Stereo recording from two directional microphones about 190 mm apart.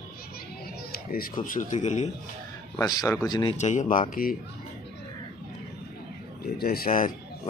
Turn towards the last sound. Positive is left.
turn(degrees=45)  # may be behind; listen again after turning